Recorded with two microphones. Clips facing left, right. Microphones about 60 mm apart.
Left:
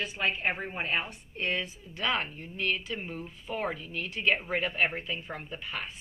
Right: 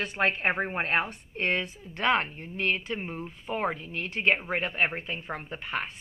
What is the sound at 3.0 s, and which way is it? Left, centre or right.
Speech, right.